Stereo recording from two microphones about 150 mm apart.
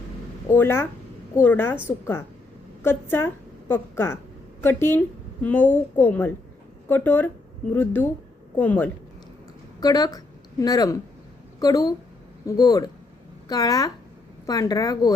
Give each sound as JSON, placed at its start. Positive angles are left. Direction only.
{"t": 0.5, "sound": "a woman's voice", "side_deg": 15}
{"t": 2.8, "sound": "a woman's voice", "side_deg": 15}
{"t": 9.8, "sound": "speech", "side_deg": 25}